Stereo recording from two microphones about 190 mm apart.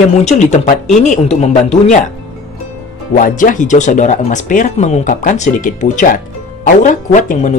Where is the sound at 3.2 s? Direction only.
45° left (ahead or behind).